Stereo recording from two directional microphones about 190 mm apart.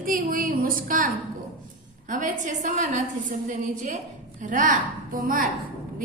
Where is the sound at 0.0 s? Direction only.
45° right (ahead or behind).